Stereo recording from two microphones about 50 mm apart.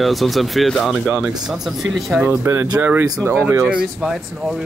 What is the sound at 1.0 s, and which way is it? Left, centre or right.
Speech, right.